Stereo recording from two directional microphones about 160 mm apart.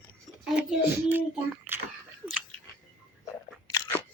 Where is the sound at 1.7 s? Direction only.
10° right (ahead or behind).